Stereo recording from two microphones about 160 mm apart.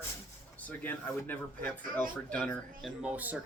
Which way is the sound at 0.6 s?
10° left (ahead or behind).